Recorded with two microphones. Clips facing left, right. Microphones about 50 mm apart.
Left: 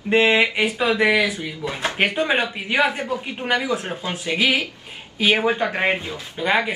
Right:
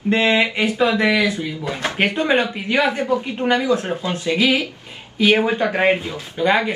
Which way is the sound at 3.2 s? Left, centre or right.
Centre.